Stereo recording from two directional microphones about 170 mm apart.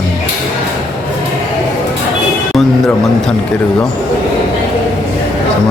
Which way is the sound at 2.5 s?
Centre (ahead or behind).